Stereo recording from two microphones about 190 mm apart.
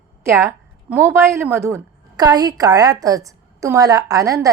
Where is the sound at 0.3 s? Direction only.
15° right (ahead or behind).